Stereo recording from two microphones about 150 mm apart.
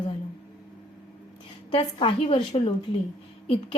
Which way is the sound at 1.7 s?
35° left (ahead or behind).